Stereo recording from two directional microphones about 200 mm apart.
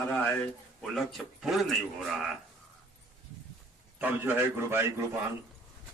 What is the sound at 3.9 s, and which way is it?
A man's voice, 10° right (ahead or behind).